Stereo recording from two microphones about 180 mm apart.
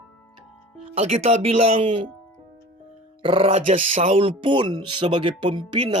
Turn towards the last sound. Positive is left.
turn(degrees=-25)  # may be behind; listen again after turning